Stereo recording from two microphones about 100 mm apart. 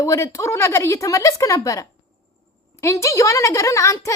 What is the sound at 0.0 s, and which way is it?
A woman's voice, 30° left (ahead or behind).